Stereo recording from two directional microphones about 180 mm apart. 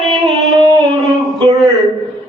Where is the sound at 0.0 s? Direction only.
Centre (ahead or behind).